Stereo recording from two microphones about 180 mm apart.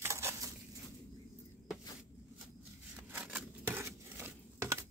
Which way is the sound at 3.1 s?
10° right (ahead or behind).